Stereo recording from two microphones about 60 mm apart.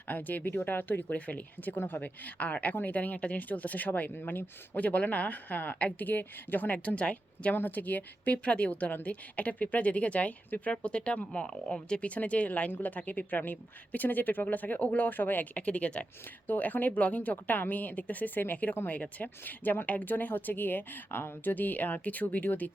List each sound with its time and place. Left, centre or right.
0.1 s a woman's voice: left
7.5 s a woman's voice: left
15.6 s a woman's voice: centre